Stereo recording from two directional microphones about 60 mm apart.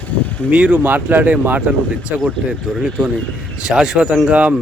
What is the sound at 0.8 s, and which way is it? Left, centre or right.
Speech, right.